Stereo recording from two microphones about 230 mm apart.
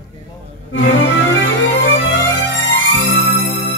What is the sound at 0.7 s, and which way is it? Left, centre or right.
Music, left.